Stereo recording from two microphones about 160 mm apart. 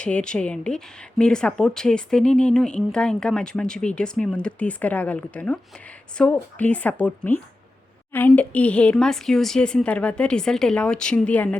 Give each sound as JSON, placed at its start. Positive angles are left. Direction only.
{"t": 0.0, "sound": "a woman's voice", "side_deg": 5}